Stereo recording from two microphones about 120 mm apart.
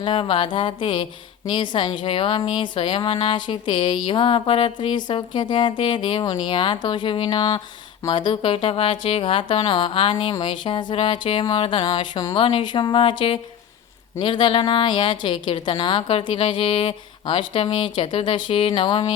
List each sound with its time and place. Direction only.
0.0 s speech: 45° left (ahead or behind)
11.8 s speech: 35° left (ahead or behind)